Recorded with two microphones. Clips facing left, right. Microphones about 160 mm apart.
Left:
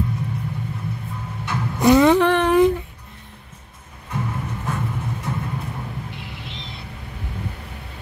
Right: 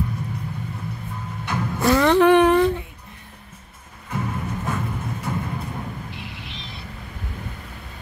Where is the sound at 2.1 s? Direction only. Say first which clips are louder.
Right 3 dB; 10° right (ahead or behind).